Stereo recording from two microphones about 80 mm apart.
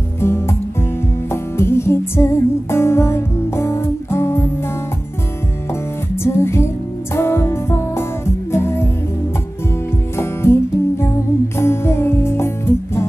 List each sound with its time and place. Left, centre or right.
0.2 s music: left
6.2 s music: left
10.1 s music: left